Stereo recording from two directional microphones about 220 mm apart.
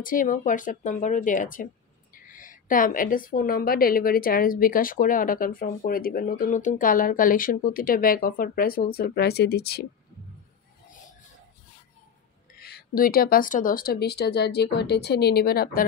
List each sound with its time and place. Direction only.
0.0 s a woman's voice: 40° left (ahead or behind)
12.5 s speech: 45° left (ahead or behind)